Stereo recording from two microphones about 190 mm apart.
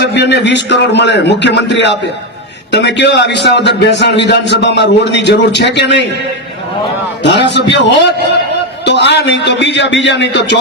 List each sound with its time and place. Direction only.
0.0 s a man's voice: 65° left (ahead or behind)
7.2 s a man's voice: 65° left (ahead or behind)